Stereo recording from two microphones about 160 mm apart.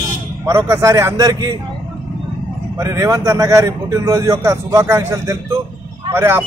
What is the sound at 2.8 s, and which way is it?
A man's voice, 20° right (ahead or behind).